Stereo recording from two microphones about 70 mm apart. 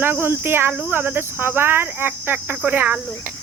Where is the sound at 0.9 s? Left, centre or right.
Right.